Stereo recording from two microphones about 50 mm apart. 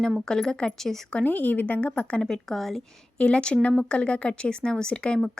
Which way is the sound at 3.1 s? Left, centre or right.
Left.